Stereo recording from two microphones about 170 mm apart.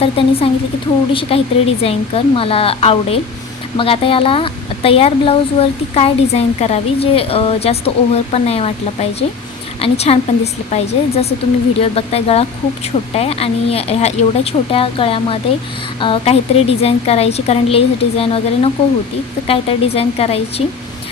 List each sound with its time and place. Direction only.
0.0 s speech: 35° left (ahead or behind)